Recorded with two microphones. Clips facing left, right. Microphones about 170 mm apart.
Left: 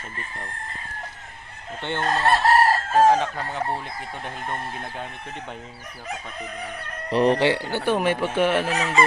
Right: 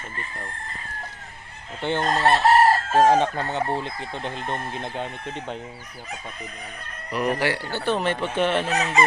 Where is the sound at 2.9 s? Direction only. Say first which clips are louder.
Left 1 dB; 25° right (ahead or behind).